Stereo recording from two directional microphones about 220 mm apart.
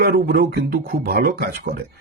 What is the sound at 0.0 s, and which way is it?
Speech, 45° right (ahead or behind).